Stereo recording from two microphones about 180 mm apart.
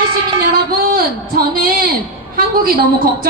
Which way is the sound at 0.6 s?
55° right (ahead or behind).